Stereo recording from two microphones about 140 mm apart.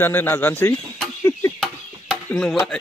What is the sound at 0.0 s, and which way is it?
Speech, 15° left (ahead or behind).